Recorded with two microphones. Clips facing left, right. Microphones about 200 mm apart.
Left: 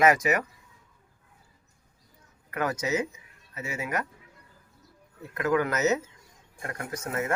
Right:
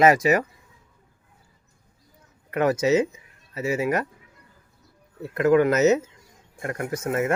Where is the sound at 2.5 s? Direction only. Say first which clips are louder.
Right 8 dB; 25° right (ahead or behind).